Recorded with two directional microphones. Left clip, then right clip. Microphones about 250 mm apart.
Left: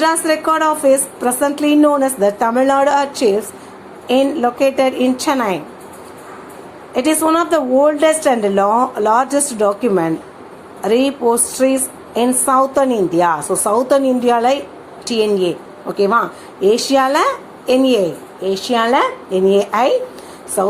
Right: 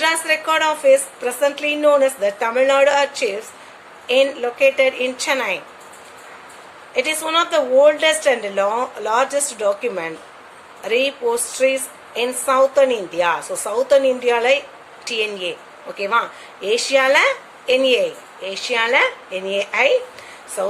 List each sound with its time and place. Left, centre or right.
0.0 s a woman's voice: centre
6.9 s a woman's voice: centre